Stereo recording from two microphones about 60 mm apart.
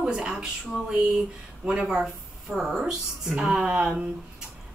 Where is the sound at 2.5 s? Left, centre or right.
Centre.